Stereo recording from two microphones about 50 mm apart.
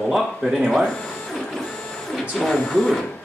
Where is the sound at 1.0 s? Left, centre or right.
Centre.